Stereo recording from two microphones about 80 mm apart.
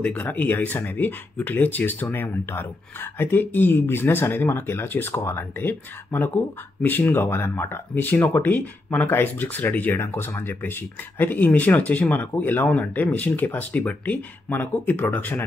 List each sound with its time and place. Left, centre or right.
0.0 s speech: left